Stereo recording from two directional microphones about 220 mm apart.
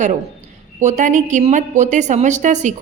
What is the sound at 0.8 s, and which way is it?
A woman's voice, 35° right (ahead or behind).